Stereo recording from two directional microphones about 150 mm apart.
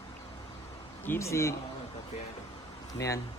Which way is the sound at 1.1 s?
20° left (ahead or behind).